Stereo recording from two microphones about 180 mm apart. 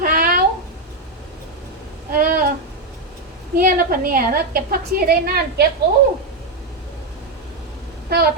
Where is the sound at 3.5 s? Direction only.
50° right (ahead or behind).